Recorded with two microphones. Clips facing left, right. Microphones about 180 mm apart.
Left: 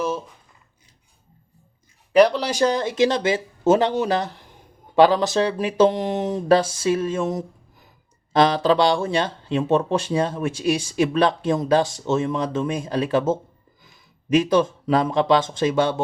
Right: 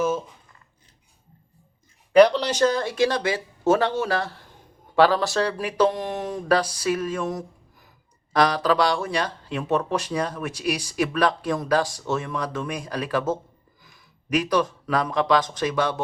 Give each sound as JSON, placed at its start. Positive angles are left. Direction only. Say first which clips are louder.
{"t": 2.1, "sound": "a man's voice", "louder": "even", "side_deg": 5}